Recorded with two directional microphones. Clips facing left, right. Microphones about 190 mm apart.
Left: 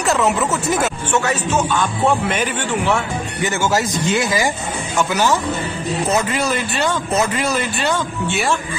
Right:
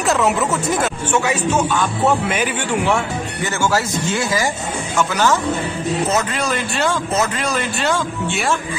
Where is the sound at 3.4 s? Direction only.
15° left (ahead or behind); by 8.6 s centre (ahead or behind).